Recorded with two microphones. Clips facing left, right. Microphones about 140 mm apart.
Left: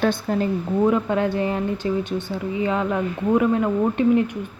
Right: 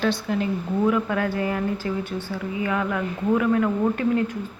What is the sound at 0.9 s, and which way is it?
A woman's voice, 25° left (ahead or behind).